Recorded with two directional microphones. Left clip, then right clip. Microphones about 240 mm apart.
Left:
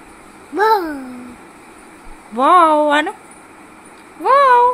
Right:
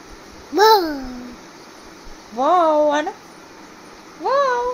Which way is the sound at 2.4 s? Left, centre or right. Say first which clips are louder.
Left 4 dB; left.